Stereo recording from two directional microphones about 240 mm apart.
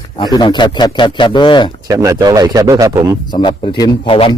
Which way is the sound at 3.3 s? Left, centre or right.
Centre.